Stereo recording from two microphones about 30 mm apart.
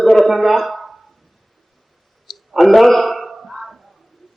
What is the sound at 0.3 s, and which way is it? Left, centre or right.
Speech, centre.